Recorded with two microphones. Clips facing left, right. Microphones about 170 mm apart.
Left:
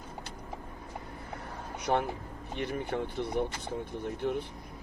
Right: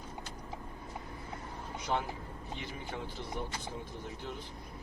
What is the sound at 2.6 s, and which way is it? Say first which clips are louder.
Speech: left 11 dB; 60° left (ahead or behind).